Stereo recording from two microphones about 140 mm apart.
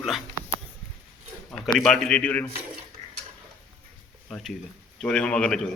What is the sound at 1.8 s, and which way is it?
Speech, 5° left (ahead or behind).